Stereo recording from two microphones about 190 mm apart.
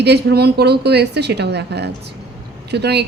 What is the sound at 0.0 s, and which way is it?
A woman's voice, 60° right (ahead or behind).